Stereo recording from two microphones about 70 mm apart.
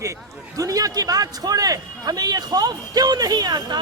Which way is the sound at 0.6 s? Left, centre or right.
Right.